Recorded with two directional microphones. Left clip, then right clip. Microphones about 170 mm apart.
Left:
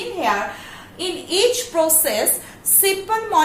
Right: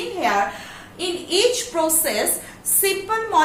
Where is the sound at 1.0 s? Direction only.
20° left (ahead or behind).